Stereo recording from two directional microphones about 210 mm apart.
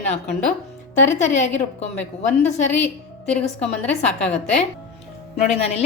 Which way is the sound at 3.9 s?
30° left (ahead or behind).